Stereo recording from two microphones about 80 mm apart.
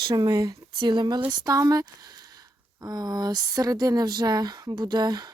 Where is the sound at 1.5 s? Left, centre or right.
Right.